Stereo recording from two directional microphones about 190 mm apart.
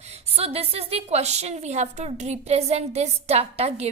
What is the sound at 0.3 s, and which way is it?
A woman's voice, 30° right (ahead or behind).